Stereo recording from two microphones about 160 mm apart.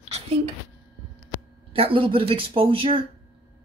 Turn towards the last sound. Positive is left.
turn(degrees=-35)  # may be behind; listen again after turning